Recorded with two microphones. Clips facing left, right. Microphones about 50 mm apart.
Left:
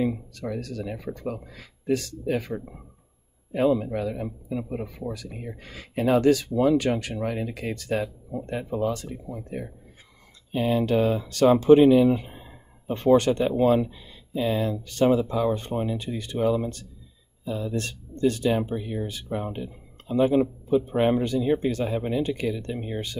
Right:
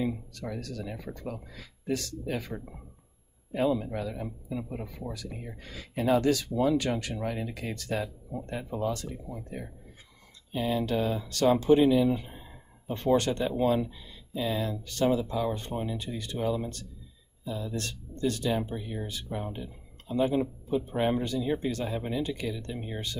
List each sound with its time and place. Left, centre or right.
0.0 s speech: left
3.8 s speech: left
10.6 s speech: left
17.7 s speech: left
18.5 s speech: left
19.3 s speech: left
21.6 s speech: left
21.9 s speech: left